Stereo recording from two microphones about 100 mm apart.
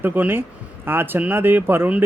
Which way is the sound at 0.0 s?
20° right (ahead or behind).